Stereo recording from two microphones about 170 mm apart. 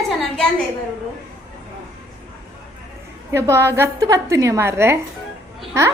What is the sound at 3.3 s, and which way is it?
A woman's voice, 15° right (ahead or behind).